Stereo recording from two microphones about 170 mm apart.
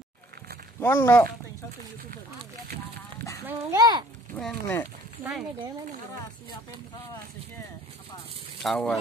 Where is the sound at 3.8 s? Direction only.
25° right (ahead or behind).